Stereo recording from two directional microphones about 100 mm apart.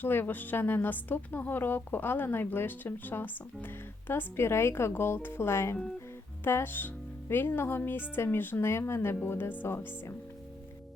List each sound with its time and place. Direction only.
0.0 s a woman's voice: 20° left (ahead or behind)